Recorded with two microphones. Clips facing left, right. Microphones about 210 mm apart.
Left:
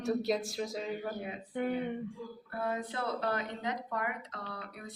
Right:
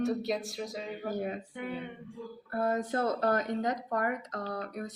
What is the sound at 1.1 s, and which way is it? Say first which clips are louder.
Speech: right 6 dB; 45° right (ahead or behind).